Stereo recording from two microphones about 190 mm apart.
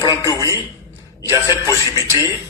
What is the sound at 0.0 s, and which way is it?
A man's voice, 20° left (ahead or behind).